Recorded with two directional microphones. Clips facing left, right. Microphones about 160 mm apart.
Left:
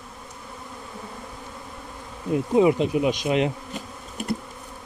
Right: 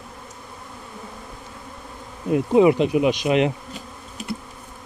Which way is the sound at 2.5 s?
75° right (ahead or behind).